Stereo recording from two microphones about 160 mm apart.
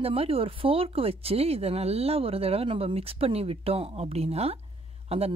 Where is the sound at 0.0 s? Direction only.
35° right (ahead or behind).